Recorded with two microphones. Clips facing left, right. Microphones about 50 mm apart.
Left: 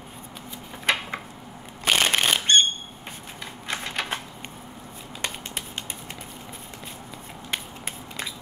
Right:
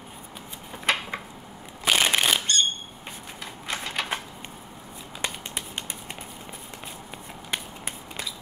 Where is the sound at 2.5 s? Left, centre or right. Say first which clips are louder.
Left 6 dB; left.